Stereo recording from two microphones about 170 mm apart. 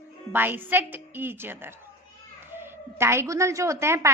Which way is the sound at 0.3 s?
10° right (ahead or behind).